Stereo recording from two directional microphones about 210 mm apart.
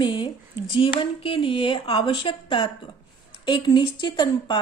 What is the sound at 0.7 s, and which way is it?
A woman's voice, 25° left (ahead or behind).